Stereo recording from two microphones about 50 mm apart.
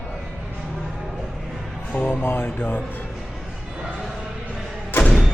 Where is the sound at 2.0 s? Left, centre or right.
Left.